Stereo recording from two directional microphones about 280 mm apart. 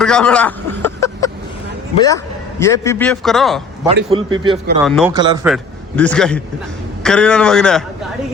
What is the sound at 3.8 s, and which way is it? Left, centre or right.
Speech, centre.